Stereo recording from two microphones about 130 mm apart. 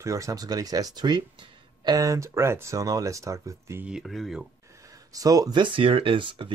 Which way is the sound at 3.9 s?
Centre (ahead or behind).